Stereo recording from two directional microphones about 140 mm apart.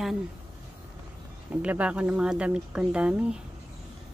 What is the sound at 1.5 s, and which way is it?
Speech, 10° right (ahead or behind).